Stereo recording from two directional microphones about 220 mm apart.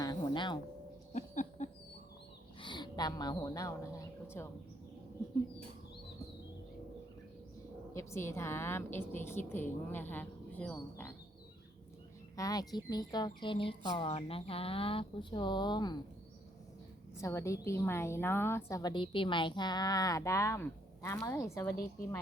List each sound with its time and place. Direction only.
0.0 s music: 20° left (ahead or behind)
1.1 s a sound: 30° left (ahead or behind)
2.6 s a woman's voice: 20° left (ahead or behind)
7.9 s a woman's voice: 10° left (ahead or behind)
12.4 s speech: 15° left (ahead or behind)
17.2 s a woman's voice: 15° left (ahead or behind)